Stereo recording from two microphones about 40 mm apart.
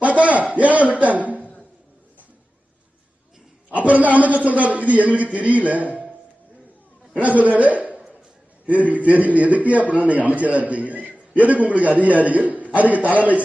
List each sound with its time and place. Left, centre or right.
0.0 s a sound: right
0.5 s music: right
3.8 s a man's voice: right
7.2 s a man's voice: right